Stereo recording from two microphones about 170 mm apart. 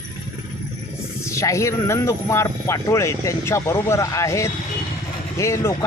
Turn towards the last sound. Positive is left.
turn(degrees=20)  # may be behind; listen again after turning